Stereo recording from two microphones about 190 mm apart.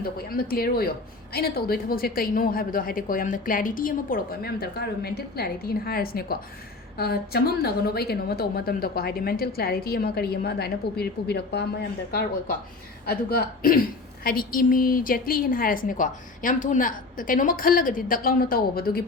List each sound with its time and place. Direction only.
0.0 s a woman's voice: 50° left (ahead or behind)
13.1 s speech: 50° left (ahead or behind)